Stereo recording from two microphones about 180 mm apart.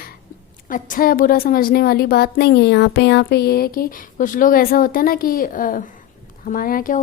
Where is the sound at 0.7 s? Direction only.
50° left (ahead or behind).